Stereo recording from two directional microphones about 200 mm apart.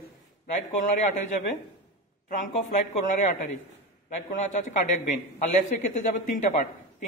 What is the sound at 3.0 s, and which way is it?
Speech, 40° left (ahead or behind).